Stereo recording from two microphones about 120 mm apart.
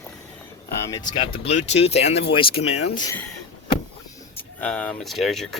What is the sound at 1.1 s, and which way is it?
Speech, 45° left (ahead or behind).